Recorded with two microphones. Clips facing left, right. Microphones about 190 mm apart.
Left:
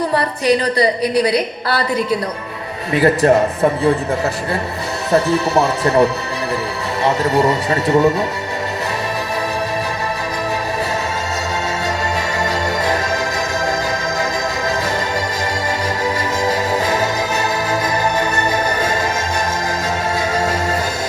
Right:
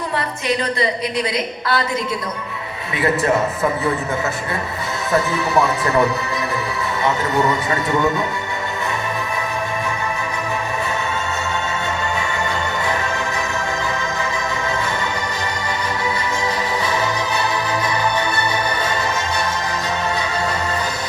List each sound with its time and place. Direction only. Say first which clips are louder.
0.1 s a woman's voice: left 6 dB; 35° left (ahead or behind)
2.9 s a man's voice: left 6 dB; 35° left (ahead or behind)
5.1 s a man's voice: left 3 dB; 30° left (ahead or behind)
16.0 s music: left 5 dB; 40° left (ahead or behind)